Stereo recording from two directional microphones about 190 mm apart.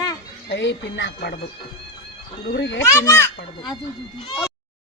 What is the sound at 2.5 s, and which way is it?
Speech, 65° left (ahead or behind).